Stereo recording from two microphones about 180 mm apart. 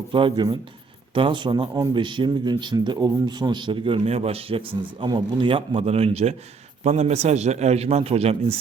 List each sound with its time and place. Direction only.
0.1 s a man's voice: 30° right (ahead or behind)